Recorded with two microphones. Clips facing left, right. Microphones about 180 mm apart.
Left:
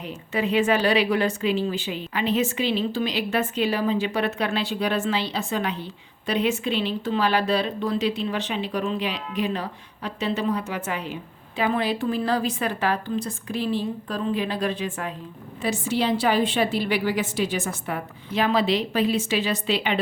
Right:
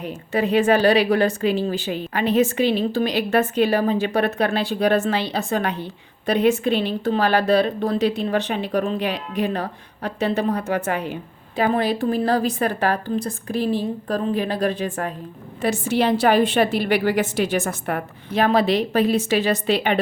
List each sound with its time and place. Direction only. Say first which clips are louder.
0.0 s a woman's voice: right 4 dB; 40° right (ahead or behind)
2.6 s speech: right 5 dB; 55° right (ahead or behind)
5.4 s a woman's voice: right 4 dB; 40° right (ahead or behind)
5.6 s a woman's voice: right 3 dB; 60° right (ahead or behind); by 15.1 s 40° right (ahead or behind)
16.2 s a woman's voice: right 5 dB; 65° right (ahead or behind)
17.7 s a woman's voice: right 4 dB; 55° right (ahead or behind)